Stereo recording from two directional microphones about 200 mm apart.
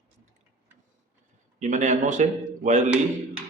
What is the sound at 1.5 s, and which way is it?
Speech, 35° right (ahead or behind).